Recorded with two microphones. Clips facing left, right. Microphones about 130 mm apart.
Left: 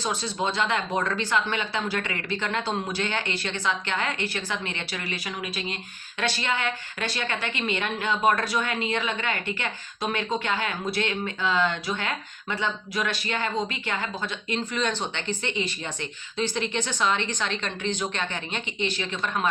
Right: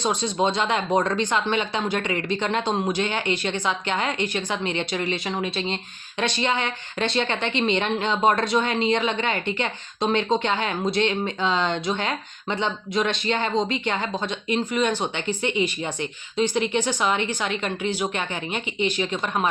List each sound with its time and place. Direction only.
0.0 s a woman's voice: 20° right (ahead or behind)
6.1 s a woman's voice: 20° right (ahead or behind)